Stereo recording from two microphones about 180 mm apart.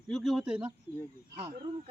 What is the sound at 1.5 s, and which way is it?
Speech, 25° right (ahead or behind).